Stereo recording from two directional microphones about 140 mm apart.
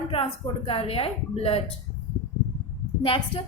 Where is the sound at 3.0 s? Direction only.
40° left (ahead or behind).